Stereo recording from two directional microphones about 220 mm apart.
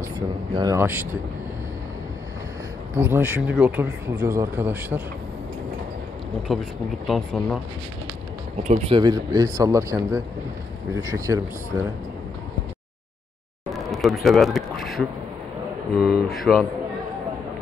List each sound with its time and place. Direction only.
0.6 s speech: 15° right (ahead or behind)
3.0 s speech: 10° right (ahead or behind)
6.5 s speech: centre (ahead or behind)
8.6 s speech: 30° right (ahead or behind)
13.8 s speech: centre (ahead or behind)